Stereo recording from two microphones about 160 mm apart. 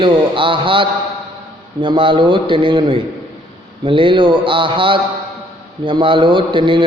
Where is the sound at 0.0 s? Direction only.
30° right (ahead or behind).